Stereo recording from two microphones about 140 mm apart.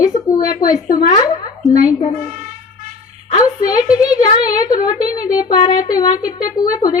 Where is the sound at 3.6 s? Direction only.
25° left (ahead or behind).